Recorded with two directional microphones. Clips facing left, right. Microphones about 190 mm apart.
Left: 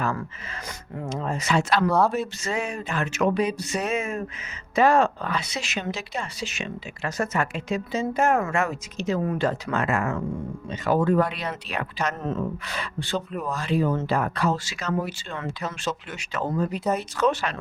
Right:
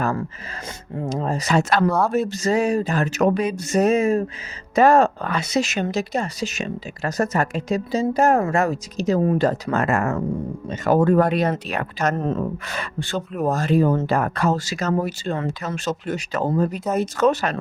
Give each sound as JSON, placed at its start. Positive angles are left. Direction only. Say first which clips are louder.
{"t": 0.9, "sound": "a woman's voice", "louder": "right 5 dB", "side_deg": -35}